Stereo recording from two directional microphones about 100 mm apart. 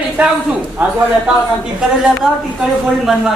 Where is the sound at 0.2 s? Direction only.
15° right (ahead or behind).